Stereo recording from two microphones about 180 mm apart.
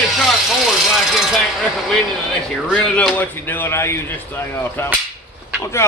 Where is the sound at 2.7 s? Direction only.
5° left (ahead or behind).